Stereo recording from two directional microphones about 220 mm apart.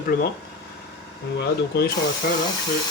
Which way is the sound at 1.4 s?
45° left (ahead or behind).